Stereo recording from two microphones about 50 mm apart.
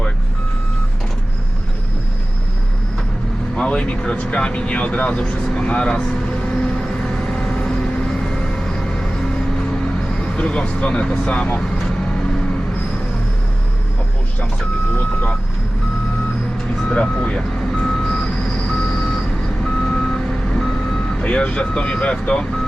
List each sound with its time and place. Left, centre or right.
3.5 s vehicle: centre
10.3 s speech: centre
14.9 s speech: left
16.8 s speech: centre
17.7 s reversing beeps: centre
20.1 s reversing beeps: centre
21.2 s speech: left